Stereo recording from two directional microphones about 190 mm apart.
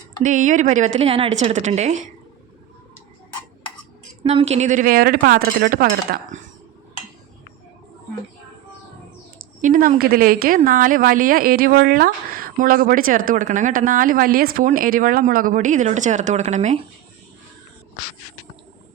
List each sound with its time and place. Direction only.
0.2 s a woman's voice: 40° right (ahead or behind)
4.2 s a woman's voice: 30° right (ahead or behind); by 6.4 s 50° right (ahead or behind)
9.6 s a woman's voice: 45° right (ahead or behind)